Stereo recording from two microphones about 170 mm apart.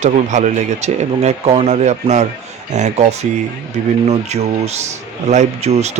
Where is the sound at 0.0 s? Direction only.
45° right (ahead or behind).